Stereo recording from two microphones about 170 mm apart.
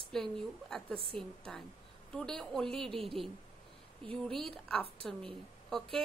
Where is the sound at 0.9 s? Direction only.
30° right (ahead or behind).